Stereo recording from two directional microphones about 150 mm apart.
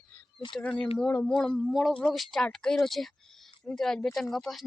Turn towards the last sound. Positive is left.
turn(degrees=0)  # may be behind; listen again after turning